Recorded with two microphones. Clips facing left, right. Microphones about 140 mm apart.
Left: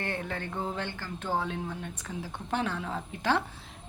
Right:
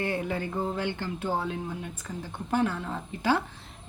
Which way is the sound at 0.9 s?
15° right (ahead or behind).